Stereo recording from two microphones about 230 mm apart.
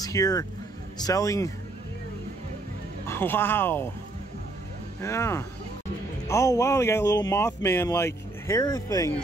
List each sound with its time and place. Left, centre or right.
0.0 s speech: centre
3.1 s speech: centre
5.0 s speech: centre